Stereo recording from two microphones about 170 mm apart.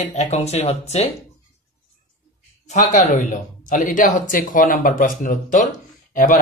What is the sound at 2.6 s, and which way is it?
Speech, 45° left (ahead or behind).